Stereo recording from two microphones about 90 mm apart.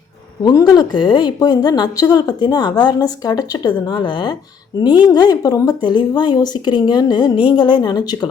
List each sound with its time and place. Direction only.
0.6 s speech: 55° left (ahead or behind)